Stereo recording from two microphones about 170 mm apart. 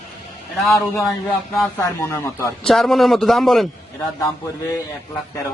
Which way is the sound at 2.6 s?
Centre (ahead or behind).